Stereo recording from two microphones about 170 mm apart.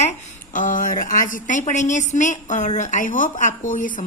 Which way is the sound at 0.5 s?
50° left (ahead or behind).